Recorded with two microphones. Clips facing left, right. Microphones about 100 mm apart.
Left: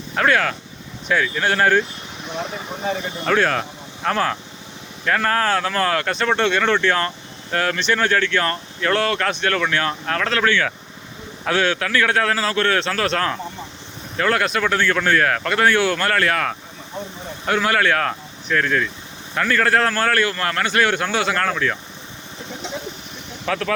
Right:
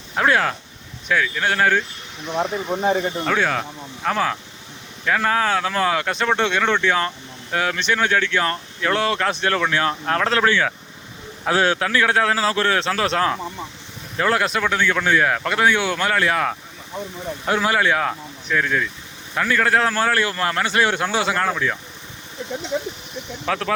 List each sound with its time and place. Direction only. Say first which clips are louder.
0.2 s speech: even; 20° right (ahead or behind)
1.0 s speech: left 1 dB; centre (ahead or behind)
3.2 s a man's voice: left 2 dB; centre (ahead or behind); by 14.6 s 20° right (ahead or behind)
14.6 s a man's voice: left 1 dB; 5° right (ahead or behind)
23.5 s a man's voice: left 1 dB; 10° right (ahead or behind)